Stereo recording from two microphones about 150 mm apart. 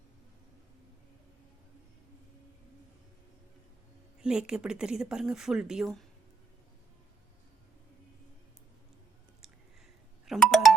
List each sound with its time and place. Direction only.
4.2 s speech: 5° right (ahead or behind)
10.2 s music: centre (ahead or behind)